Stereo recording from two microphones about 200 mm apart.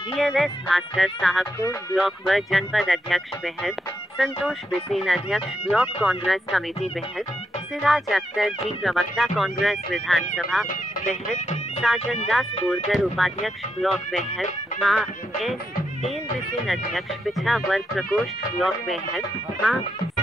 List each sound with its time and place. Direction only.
0.2 s speech: centre (ahead or behind)
1.6 s speech: 15° left (ahead or behind)
2.0 s speech: centre (ahead or behind)
7.8 s speech: centre (ahead or behind)
11.4 s speech: 35° left (ahead or behind)
12.6 s speech: centre (ahead or behind)
16.6 s speech: centre (ahead or behind)